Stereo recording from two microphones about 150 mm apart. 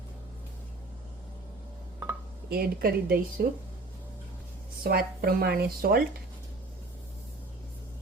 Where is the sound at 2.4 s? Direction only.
90° right.